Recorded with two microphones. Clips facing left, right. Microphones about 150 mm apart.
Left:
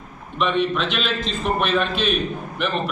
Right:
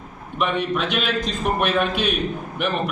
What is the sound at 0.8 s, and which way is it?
A man's voice, 10° right (ahead or behind).